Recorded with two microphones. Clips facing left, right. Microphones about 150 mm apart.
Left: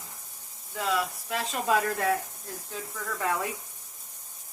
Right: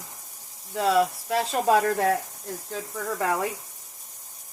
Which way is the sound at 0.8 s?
35° right (ahead or behind).